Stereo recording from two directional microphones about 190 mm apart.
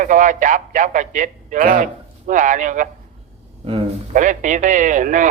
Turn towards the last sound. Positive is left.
turn(degrees=-40)  # may be behind; listen again after turning